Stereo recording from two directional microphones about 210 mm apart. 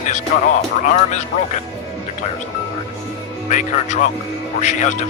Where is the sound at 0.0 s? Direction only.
35° left (ahead or behind).